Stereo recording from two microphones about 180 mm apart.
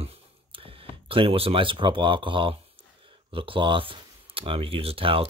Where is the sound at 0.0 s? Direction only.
30° right (ahead or behind).